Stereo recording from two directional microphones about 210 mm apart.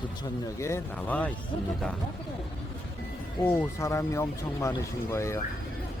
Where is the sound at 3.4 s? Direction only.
10° left (ahead or behind).